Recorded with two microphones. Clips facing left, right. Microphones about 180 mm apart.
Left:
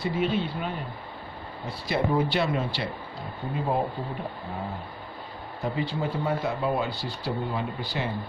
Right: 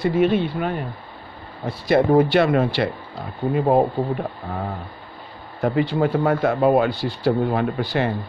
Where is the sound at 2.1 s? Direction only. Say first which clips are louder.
Right 8 dB; 55° right (ahead or behind).